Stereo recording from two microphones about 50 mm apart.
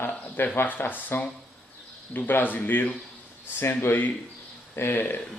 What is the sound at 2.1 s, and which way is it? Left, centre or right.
Speech, left.